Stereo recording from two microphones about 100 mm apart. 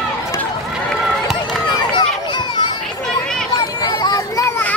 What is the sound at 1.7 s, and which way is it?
Run, 45° left (ahead or behind).